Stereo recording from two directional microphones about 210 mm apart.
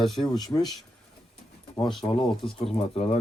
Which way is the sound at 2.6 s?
30° left (ahead or behind).